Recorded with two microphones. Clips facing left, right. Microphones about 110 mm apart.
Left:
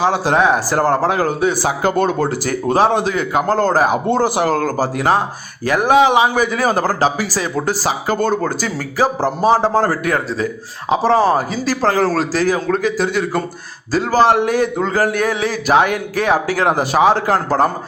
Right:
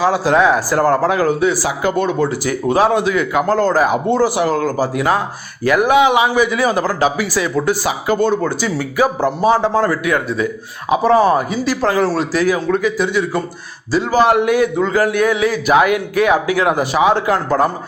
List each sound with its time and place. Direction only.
0.0 s speech: 25° left (ahead or behind)
1.6 s a man's voice: 40° left (ahead or behind)
3.6 s a man's voice: 45° left (ahead or behind)